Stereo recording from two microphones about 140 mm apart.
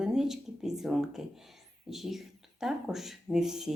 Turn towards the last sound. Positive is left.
turn(degrees=-5)  # may be behind; listen again after turning